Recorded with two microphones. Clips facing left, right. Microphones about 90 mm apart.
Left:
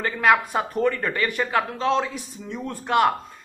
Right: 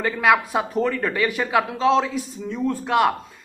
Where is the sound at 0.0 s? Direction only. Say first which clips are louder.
Right 1 dB; 5° right (ahead or behind).